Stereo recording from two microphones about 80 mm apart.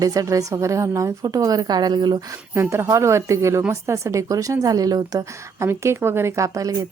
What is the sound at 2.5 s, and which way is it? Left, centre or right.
Speech, right.